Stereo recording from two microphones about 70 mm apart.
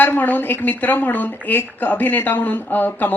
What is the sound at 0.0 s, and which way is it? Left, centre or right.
A woman's voice, left.